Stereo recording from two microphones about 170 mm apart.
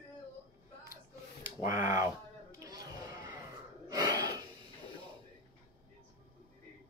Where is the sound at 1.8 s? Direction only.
20° right (ahead or behind).